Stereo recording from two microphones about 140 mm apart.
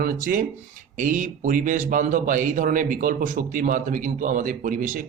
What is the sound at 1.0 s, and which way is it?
A man's voice, 70° right (ahead or behind).